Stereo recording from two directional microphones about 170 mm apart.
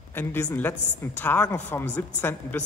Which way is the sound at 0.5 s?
10° left (ahead or behind).